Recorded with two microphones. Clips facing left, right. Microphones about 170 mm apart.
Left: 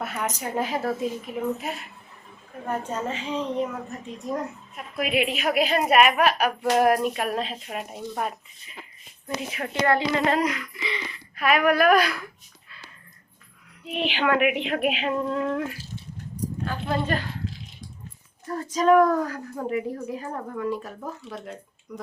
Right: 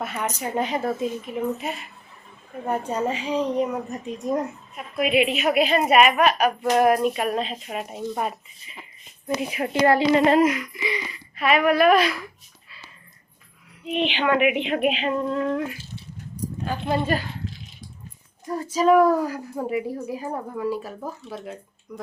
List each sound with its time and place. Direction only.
0.0 s a woman's voice: centre (ahead or behind)
2.6 s a woman's voice: 10° right (ahead or behind)
4.8 s a woman's voice: centre (ahead or behind)
9.6 s speech: 25° right (ahead or behind)
11.3 s a woman's voice: centre (ahead or behind)
13.8 s a woman's voice: centre (ahead or behind)
17.4 s coin: centre (ahead or behind)
18.4 s a woman's voice: 10° right (ahead or behind)